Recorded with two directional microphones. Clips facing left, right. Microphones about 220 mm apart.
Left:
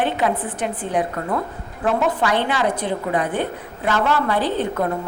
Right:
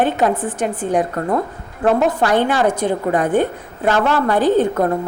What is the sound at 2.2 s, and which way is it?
A woman's voice, 45° right (ahead or behind).